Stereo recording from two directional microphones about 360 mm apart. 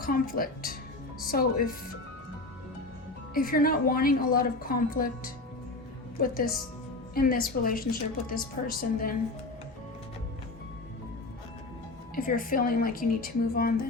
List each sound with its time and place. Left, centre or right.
0.0 s a woman's voice: left
3.3 s a woman's voice: left
12.1 s a woman's voice: left